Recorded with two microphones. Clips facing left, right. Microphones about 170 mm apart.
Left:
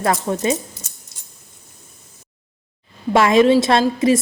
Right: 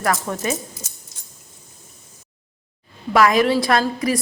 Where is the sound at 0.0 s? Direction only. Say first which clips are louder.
Left 3 dB; 25° left (ahead or behind).